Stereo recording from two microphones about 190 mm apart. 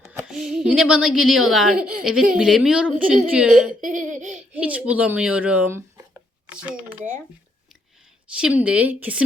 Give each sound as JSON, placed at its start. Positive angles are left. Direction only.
{"t": 0.1, "sound": "speech", "side_deg": -5}
{"t": 3.8, "sound": "giggle", "side_deg": -40}
{"t": 4.5, "sound": "speech", "side_deg": -5}
{"t": 8.4, "sound": "a woman's voice", "side_deg": -5}